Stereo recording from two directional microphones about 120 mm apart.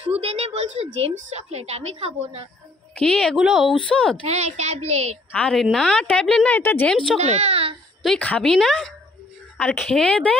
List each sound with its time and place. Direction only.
0.0 s a sound: 60° right (ahead or behind)
1.0 s a woman's voice: 60° right (ahead or behind)
3.0 s a woman's voice: 5° left (ahead or behind)
3.9 s a woman's voice: 10° left (ahead or behind)
4.3 s a woman's voice: 65° right (ahead or behind)
5.3 s a woman's voice: 5° left (ahead or behind)
7.2 s speech: 65° right (ahead or behind)
8.0 s a woman's voice: centre (ahead or behind)